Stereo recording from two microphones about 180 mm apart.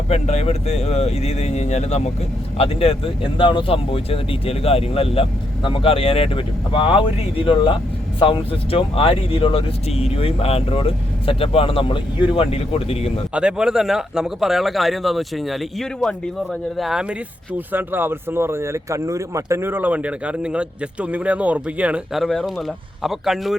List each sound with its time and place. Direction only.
0.1 s speech: 40° left (ahead or behind)
13.3 s speech: 5° right (ahead or behind)